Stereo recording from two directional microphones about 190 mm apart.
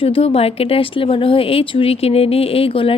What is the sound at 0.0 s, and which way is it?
Speech, 30° left (ahead or behind).